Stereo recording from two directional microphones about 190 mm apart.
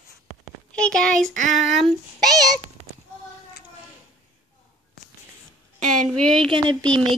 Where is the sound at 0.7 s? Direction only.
5° left (ahead or behind).